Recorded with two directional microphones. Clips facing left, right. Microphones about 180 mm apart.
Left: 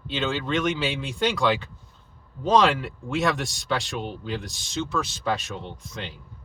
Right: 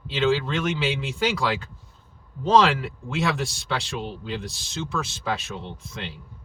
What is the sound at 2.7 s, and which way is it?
Speech, centre (ahead or behind).